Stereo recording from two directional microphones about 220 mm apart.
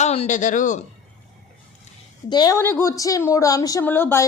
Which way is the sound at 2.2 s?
20° left (ahead or behind).